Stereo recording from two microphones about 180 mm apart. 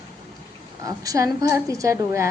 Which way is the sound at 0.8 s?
20° right (ahead or behind).